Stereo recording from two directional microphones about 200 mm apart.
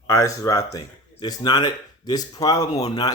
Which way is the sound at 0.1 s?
15° left (ahead or behind).